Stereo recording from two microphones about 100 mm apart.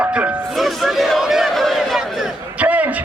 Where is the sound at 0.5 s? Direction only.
Centre (ahead or behind).